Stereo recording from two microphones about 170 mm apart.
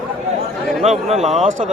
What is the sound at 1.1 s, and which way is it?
Speech, 40° right (ahead or behind).